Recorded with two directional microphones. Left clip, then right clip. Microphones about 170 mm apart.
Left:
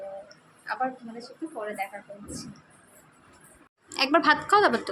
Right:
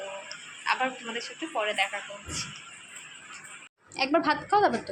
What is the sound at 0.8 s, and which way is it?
Speech, 15° left (ahead or behind).